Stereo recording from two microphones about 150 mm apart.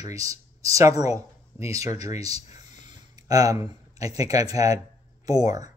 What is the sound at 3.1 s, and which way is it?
Speech, 25° right (ahead or behind).